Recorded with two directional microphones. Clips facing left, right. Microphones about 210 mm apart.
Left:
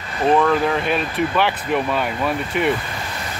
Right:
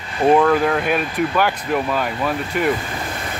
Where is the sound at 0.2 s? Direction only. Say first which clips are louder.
Right 2 dB; 10° right (ahead or behind).